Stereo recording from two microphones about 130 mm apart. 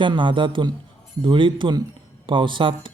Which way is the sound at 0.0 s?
40° right (ahead or behind).